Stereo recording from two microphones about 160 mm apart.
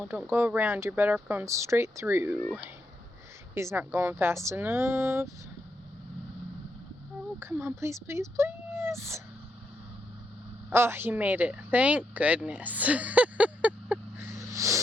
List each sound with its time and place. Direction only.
0.0 s speech: 10° right (ahead or behind)
3.5 s speech: 15° right (ahead or behind)
7.3 s speech: 15° right (ahead or behind)
10.7 s speech: 15° right (ahead or behind)